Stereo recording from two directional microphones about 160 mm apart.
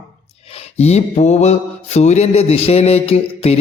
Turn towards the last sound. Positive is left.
turn(degrees=40)  # may be behind; listen again after turning